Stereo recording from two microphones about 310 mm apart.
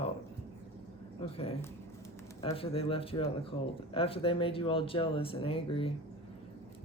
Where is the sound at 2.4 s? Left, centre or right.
Centre.